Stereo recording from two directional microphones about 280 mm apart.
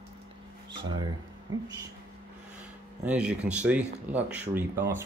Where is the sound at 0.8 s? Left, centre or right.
Centre.